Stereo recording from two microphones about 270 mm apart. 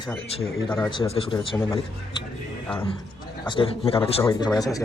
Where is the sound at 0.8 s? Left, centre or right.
Centre.